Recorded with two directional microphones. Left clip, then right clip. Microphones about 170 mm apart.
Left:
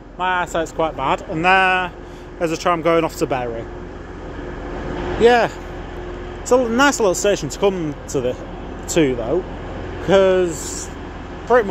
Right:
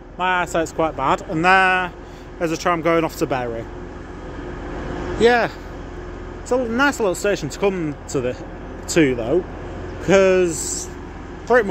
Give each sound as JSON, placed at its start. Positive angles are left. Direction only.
{"t": 0.2, "sound": "speech", "side_deg": -40}
{"t": 5.2, "sound": "speech", "side_deg": -10}
{"t": 6.7, "sound": "speech", "side_deg": 5}
{"t": 7.6, "sound": "speech", "side_deg": -15}
{"t": 8.9, "sound": "speech", "side_deg": -30}